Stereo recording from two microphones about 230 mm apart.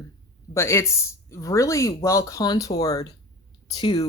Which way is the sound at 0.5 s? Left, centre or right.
Centre.